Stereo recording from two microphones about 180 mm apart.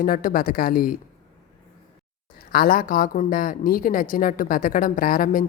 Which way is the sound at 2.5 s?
55° left (ahead or behind).